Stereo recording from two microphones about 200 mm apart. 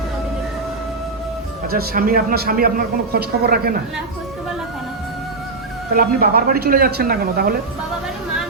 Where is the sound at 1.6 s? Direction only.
45° right (ahead or behind).